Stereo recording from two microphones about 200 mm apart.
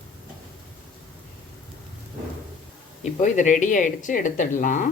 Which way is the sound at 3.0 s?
40° left (ahead or behind).